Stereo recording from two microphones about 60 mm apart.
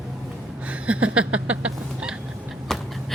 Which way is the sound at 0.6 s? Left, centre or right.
Right.